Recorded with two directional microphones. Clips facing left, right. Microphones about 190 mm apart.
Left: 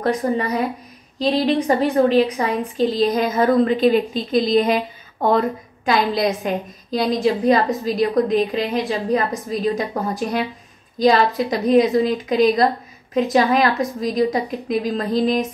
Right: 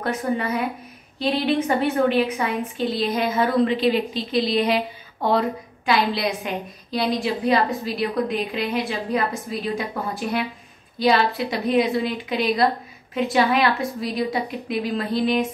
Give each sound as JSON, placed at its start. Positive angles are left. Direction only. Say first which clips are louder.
{"t": 0.0, "sound": "a woman's voice", "louder": "left 4 dB", "side_deg": 35}